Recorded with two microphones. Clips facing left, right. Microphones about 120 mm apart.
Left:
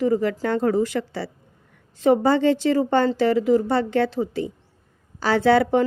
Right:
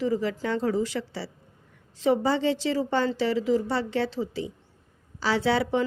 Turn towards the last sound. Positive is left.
turn(degrees=50)  # may be behind; listen again after turning